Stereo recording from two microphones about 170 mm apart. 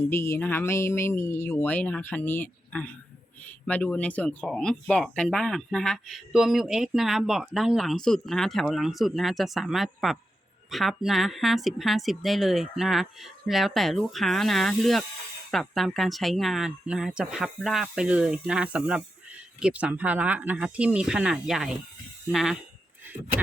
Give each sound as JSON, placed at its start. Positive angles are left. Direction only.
{"t": 0.1, "sound": "speech", "side_deg": 15}